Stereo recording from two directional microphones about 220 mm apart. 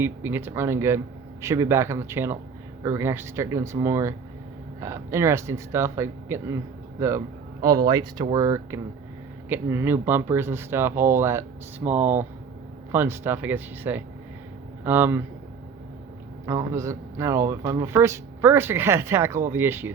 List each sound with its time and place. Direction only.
0.0 s speech: 10° right (ahead or behind)
7.6 s speech: 15° right (ahead or behind)
16.5 s speech: 15° right (ahead or behind)